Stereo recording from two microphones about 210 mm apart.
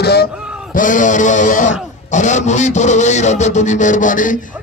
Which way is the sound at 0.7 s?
40° left (ahead or behind).